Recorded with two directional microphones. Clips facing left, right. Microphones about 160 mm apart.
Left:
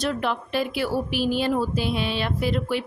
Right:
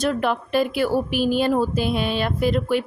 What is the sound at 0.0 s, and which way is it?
A woman's voice, 50° right (ahead or behind).